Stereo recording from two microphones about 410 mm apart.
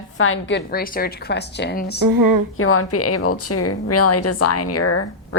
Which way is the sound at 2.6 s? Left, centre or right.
Left.